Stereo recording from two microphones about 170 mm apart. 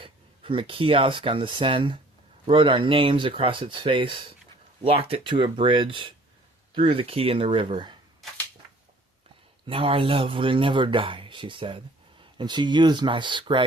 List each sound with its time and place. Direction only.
0.0 s speech: 30° right (ahead or behind)
9.6 s speech: 35° right (ahead or behind)